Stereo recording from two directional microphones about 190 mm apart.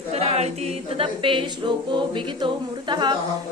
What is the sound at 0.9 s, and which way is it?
A capella, 30° right (ahead or behind).